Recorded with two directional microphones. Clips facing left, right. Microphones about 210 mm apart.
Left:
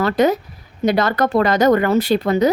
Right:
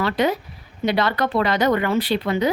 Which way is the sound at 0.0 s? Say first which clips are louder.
Left 5 dB; 40° left (ahead or behind).